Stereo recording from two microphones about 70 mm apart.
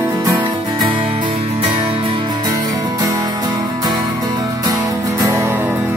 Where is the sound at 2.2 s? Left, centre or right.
Right.